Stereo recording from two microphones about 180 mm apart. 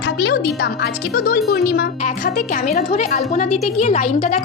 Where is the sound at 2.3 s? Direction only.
50° left (ahead or behind).